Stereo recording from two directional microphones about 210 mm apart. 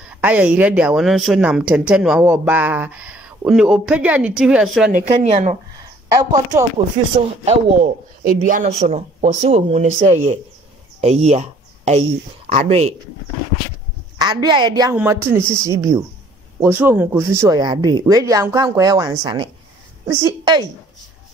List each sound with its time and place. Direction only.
0.1 s speech: 5° right (ahead or behind)
4.9 s a man's voice: 30° right (ahead or behind)
6.1 s speech: 15° right (ahead or behind)
7.4 s a man's voice: 40° right (ahead or behind)
14.1 s a woman's voice: 20° right (ahead or behind)